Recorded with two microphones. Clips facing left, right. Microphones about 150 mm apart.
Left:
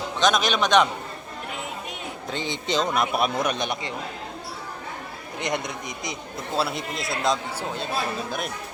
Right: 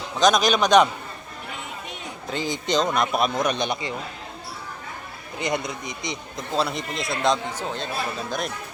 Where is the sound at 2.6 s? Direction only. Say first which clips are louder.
Right 1 dB; 5° left (ahead or behind).